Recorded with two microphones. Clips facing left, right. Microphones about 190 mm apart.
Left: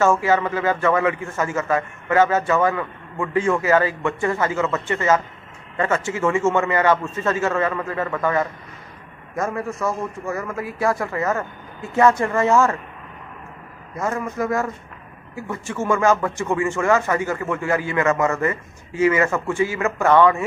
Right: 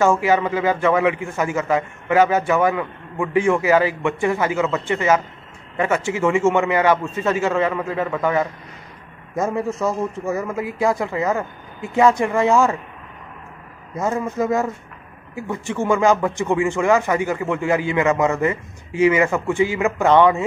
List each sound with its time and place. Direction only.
0.0 s a man's voice: 15° right (ahead or behind)
13.9 s a man's voice: 20° right (ahead or behind)